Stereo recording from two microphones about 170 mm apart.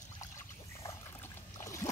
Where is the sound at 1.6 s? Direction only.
15° left (ahead or behind).